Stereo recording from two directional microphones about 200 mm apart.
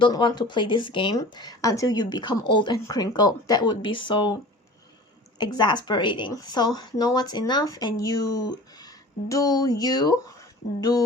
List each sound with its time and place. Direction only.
0.0 s a woman's voice: 20° left (ahead or behind)
5.4 s a woman's voice: 20° left (ahead or behind)